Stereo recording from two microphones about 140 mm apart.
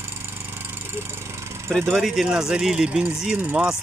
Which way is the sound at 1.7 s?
Centre (ahead or behind).